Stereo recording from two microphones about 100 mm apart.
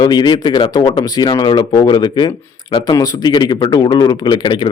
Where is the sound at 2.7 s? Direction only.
35° left (ahead or behind).